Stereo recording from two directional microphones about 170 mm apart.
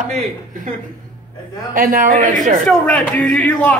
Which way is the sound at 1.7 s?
55° right (ahead or behind).